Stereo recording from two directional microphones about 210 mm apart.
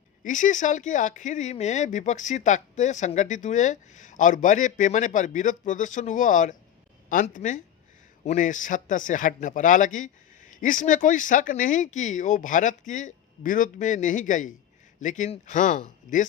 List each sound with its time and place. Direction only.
0.2 s speech: 40° left (ahead or behind)